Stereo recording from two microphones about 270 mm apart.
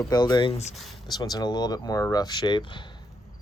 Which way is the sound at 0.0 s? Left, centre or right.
Centre.